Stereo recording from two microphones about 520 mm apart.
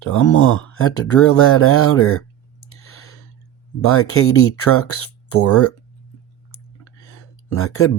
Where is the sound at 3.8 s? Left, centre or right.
Left.